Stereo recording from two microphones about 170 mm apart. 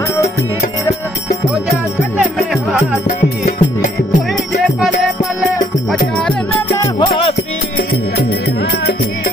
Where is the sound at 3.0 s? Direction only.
45° left (ahead or behind).